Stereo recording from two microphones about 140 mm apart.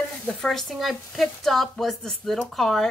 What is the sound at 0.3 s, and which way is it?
Speech, centre (ahead or behind).